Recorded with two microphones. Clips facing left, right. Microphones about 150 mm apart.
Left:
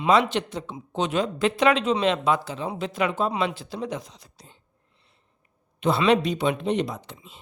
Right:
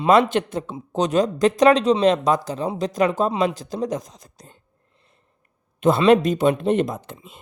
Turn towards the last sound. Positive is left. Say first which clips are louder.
# right 5 dB
turn(degrees=-50)  # may be behind; listen again after turning